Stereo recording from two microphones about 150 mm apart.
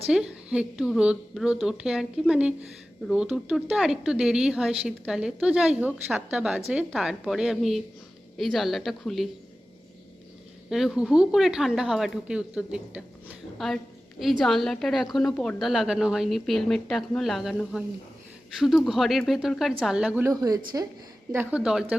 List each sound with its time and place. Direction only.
0.1 s speech: 5° right (ahead or behind)
10.7 s speech: 5° right (ahead or behind)
20.2 s speech: 25° right (ahead or behind)
21.3 s a woman's voice: 5° right (ahead or behind)